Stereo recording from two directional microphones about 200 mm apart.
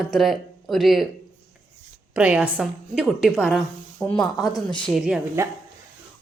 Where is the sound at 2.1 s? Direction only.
5° right (ahead or behind).